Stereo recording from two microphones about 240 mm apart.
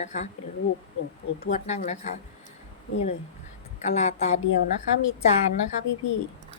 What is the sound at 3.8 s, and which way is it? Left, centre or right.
Speech, left.